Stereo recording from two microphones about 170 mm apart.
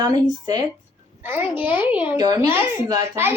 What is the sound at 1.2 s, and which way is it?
Speech, 10° right (ahead or behind).